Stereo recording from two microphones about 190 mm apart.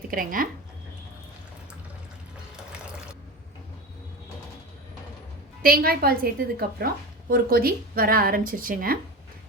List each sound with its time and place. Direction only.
0.1 s a woman's voice: 45° right (ahead or behind)
5.6 s a woman's voice: 50° right (ahead or behind)